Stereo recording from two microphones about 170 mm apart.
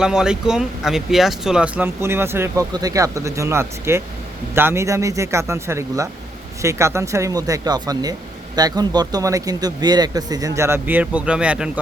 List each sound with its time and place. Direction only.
0.0 s speech: 5° right (ahead or behind)